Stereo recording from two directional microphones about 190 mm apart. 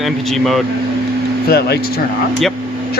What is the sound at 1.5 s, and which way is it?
Speech, 60° left (ahead or behind).